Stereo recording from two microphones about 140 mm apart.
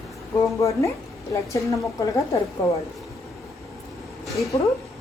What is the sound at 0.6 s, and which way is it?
A woman's voice, 20° left (ahead or behind).